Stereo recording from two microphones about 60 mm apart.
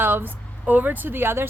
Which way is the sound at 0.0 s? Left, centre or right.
Right.